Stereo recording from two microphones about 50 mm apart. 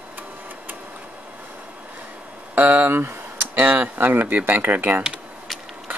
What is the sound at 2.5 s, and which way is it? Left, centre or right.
Speech, right.